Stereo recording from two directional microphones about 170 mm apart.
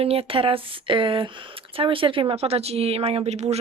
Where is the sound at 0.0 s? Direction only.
35° right (ahead or behind).